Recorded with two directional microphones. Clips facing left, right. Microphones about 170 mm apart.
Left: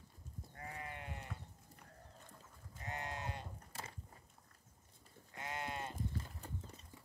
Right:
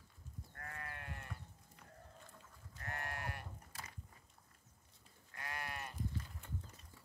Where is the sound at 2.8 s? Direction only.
20° left (ahead or behind).